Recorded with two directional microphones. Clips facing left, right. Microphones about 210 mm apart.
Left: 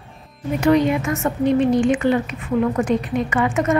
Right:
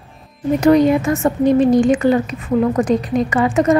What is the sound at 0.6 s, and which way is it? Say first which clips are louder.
A woman's voice: right 4 dB; 40° right (ahead or behind).